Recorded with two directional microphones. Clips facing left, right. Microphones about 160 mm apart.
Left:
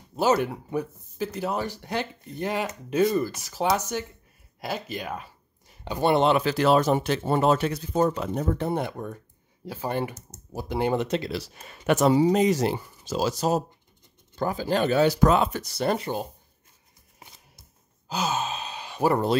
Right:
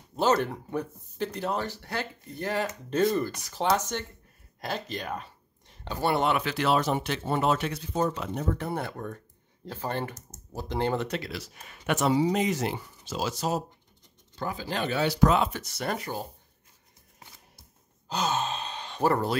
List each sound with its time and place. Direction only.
0.1 s speech: 10° left (ahead or behind)
4.6 s a sound: 5° left (ahead or behind)
5.9 s speech: 20° left (ahead or behind)
6.3 s speech: 35° left (ahead or behind)
8.6 s speech: 20° left (ahead or behind)
18.0 s sigh: 5° left (ahead or behind)